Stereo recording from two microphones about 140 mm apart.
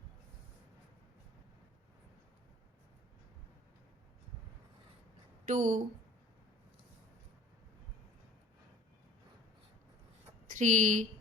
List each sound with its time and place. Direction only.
5.5 s speech: 65° right (ahead or behind)
10.5 s speech: 60° right (ahead or behind)